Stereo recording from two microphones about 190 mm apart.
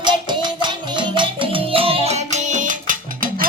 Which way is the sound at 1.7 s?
30° right (ahead or behind).